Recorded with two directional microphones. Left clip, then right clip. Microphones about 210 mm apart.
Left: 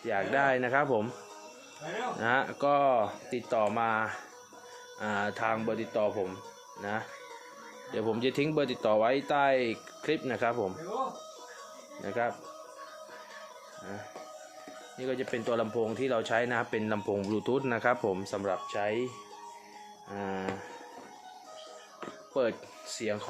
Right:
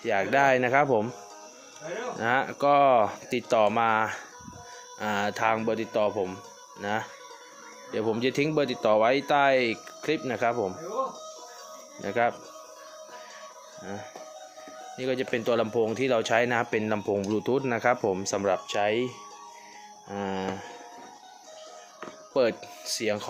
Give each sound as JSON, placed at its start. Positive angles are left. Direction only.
{"t": 0.0, "sound": "speech", "side_deg": -45}
{"t": 2.1, "sound": "speech", "side_deg": -20}
{"t": 7.9, "sound": "speech", "side_deg": -25}
{"t": 12.0, "sound": "speech", "side_deg": -35}
{"t": 13.8, "sound": "speech", "side_deg": -45}
{"t": 18.3, "sound": "speech", "side_deg": -40}
{"t": 22.3, "sound": "speech", "side_deg": -45}